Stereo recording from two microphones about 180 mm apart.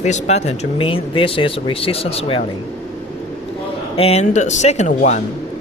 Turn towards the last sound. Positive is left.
turn(degrees=40)  # may be behind; listen again after turning